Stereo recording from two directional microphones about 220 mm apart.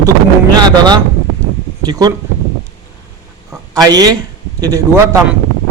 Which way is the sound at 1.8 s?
15° right (ahead or behind).